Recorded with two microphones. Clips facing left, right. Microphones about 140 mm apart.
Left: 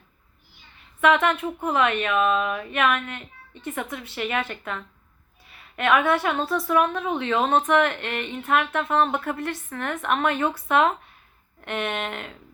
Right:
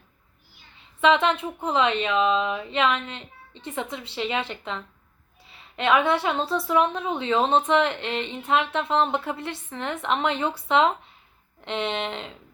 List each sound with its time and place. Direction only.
1.0 s a woman's voice: 20° right (ahead or behind)